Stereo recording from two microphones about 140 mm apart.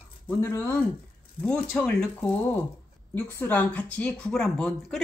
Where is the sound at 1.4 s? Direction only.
10° left (ahead or behind).